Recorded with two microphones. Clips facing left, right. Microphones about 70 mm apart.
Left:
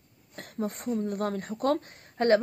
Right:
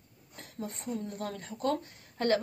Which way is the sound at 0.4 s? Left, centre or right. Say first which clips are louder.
Left 7 dB; left.